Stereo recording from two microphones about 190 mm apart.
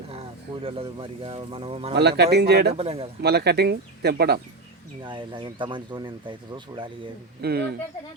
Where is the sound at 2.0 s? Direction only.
60° right (ahead or behind).